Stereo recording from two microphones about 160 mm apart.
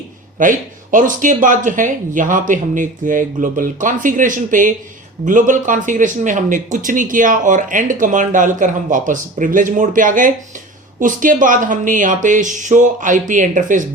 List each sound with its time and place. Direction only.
0.3 s speech: 55° right (ahead or behind)